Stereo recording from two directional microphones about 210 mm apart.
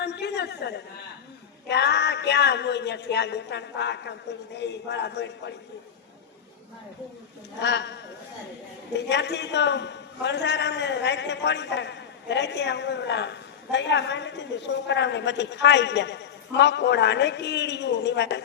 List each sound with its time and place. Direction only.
0.0 s a sound: 55° left (ahead or behind)
1.6 s a man's voice: 55° left (ahead or behind)
7.6 s a man's voice: 55° left (ahead or behind)